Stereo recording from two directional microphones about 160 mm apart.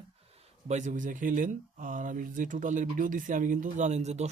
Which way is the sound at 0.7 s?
50° right (ahead or behind).